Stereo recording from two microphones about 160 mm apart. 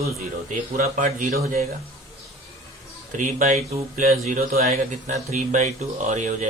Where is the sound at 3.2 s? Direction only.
55° right (ahead or behind).